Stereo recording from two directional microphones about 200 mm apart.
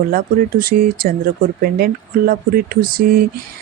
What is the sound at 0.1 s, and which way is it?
Mantra, 45° right (ahead or behind).